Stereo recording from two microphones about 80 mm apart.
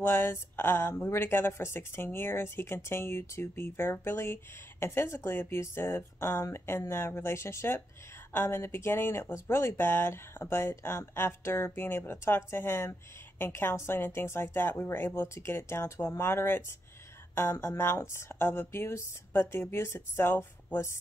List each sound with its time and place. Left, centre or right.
0.0 s speech: left